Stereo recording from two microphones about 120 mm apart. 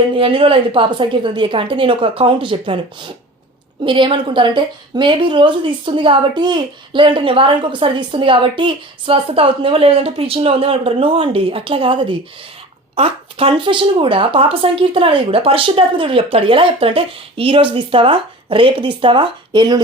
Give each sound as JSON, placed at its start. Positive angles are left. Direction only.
{"t": 0.2, "sound": "a woman's voice", "side_deg": -50}